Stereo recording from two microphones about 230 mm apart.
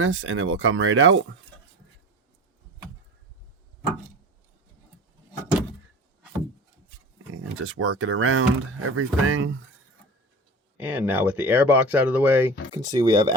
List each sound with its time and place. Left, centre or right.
0.0 s speech: right
7.6 s speech: right
10.8 s speech: centre